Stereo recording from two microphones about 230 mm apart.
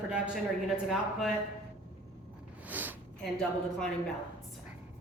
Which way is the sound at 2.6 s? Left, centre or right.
Centre.